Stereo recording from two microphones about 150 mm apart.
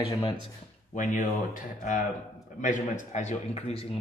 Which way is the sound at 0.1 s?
35° left (ahead or behind).